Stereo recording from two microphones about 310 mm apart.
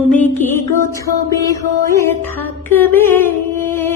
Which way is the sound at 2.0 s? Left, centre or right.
Centre.